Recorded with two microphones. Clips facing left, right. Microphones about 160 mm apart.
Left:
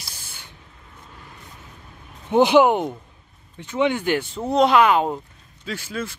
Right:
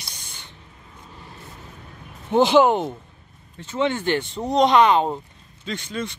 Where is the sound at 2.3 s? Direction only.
10° left (ahead or behind).